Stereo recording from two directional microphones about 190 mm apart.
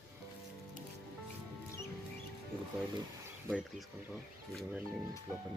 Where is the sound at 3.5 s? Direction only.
5° right (ahead or behind).